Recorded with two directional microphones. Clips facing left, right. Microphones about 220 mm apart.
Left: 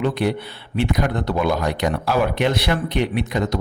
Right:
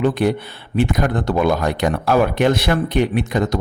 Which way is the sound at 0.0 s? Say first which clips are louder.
Right 4 dB; 45° right (ahead or behind).